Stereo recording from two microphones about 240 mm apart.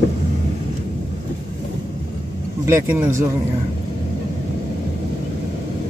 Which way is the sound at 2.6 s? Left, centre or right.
Centre.